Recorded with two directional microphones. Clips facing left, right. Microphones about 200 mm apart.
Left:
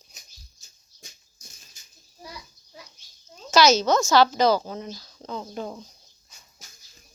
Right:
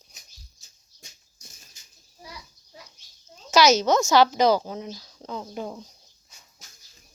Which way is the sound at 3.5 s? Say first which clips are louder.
Even; 15° right (ahead or behind).